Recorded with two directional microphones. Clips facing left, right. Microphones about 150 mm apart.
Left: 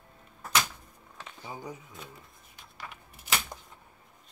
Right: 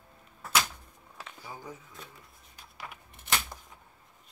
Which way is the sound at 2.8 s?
Centre (ahead or behind).